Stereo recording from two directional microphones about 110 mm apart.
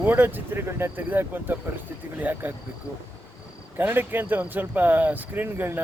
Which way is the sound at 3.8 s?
15° right (ahead or behind).